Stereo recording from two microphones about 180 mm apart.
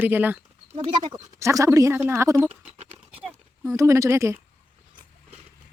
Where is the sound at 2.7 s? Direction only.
35° right (ahead or behind).